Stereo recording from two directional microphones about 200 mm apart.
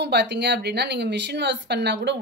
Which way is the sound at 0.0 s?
55° right (ahead or behind).